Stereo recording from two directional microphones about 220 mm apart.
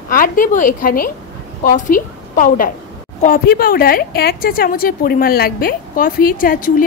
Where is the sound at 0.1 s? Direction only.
35° left (ahead or behind).